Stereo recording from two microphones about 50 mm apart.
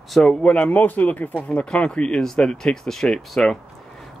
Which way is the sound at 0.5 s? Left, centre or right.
Left.